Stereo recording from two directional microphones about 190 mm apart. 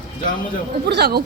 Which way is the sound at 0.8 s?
60° right (ahead or behind).